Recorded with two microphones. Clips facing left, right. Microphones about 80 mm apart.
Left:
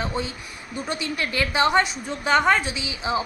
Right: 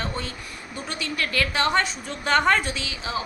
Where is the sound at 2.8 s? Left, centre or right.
Centre.